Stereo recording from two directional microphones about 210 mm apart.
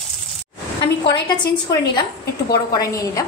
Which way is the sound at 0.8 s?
20° left (ahead or behind).